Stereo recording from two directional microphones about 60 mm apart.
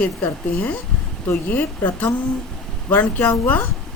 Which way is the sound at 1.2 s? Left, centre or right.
Left.